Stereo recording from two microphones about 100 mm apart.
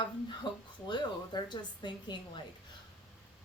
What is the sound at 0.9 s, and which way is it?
A woman's voice, 45° left (ahead or behind).